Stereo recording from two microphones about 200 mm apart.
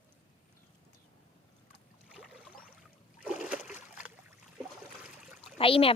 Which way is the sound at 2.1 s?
Centre (ahead or behind).